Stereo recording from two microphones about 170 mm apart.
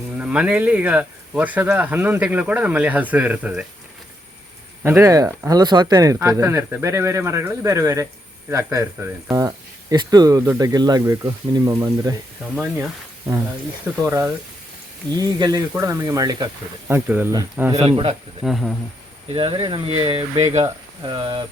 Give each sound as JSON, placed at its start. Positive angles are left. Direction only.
{"t": 0.2, "sound": "speech", "side_deg": -10}
{"t": 4.8, "sound": "speech", "side_deg": -15}
{"t": 13.9, "sound": "speech", "side_deg": -15}
{"t": 17.8, "sound": "speech", "side_deg": -35}
{"t": 18.4, "sound": "speech", "side_deg": 0}
{"t": 19.3, "sound": "speech", "side_deg": -35}
{"t": 20.6, "sound": "speech", "side_deg": -20}